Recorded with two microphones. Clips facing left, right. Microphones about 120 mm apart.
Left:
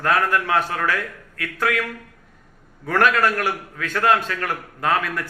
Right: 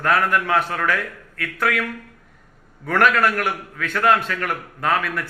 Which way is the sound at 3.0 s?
25° left (ahead or behind).